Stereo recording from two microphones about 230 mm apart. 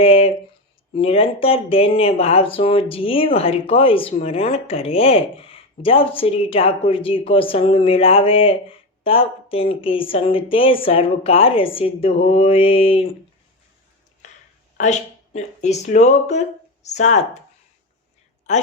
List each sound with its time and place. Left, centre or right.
0.0 s speech: left
14.2 s a sound: left
14.8 s speech: left